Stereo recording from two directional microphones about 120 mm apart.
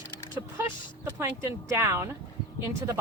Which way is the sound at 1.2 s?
20° right (ahead or behind).